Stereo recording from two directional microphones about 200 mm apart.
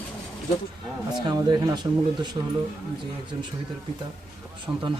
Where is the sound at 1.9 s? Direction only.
20° right (ahead or behind).